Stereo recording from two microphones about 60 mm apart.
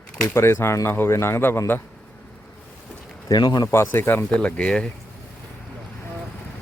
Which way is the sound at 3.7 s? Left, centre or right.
Left.